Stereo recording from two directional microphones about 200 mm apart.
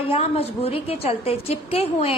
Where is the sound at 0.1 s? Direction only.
30° left (ahead or behind).